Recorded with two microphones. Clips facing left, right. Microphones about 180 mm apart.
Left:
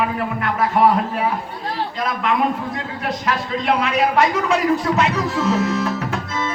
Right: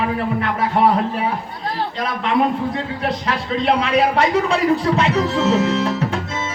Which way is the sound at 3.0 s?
30° right (ahead or behind).